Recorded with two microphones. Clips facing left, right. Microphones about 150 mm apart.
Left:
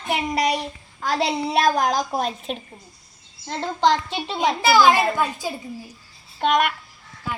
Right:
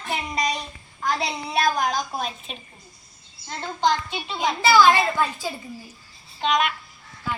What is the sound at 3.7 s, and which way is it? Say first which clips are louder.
Speech: left 3 dB; 80° left.